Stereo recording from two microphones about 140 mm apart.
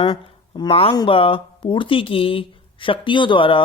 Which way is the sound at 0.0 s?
30° left (ahead or behind).